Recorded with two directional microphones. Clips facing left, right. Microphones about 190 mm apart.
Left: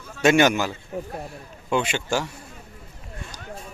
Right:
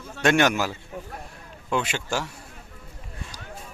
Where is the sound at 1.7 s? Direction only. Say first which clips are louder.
Left 3 dB; centre (ahead or behind).